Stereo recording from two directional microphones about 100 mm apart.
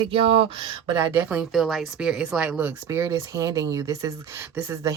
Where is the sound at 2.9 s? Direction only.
30° right (ahead or behind).